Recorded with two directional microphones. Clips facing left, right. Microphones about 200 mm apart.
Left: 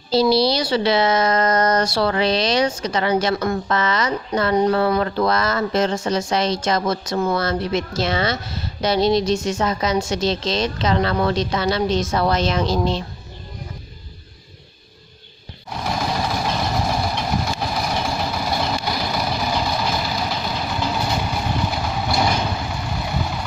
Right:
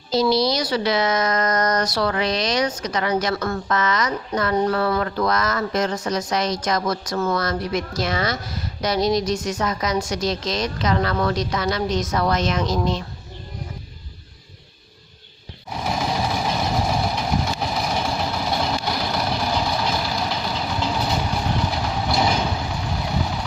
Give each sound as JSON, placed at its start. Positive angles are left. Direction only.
{"t": 0.1, "sound": "a woman's voice", "side_deg": 30}
{"t": 15.7, "sound": "vehicle", "side_deg": -5}